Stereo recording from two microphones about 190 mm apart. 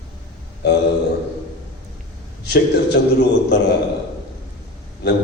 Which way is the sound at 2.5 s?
60° left (ahead or behind).